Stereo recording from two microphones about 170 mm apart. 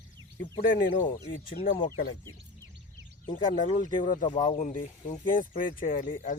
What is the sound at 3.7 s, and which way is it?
Speech, 50° left (ahead or behind).